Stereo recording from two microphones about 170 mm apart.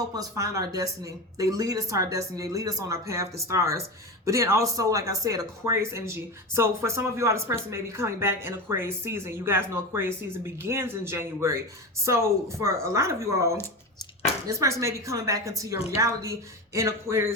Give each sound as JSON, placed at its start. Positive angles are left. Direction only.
{"t": 0.1, "sound": "speech", "side_deg": -20}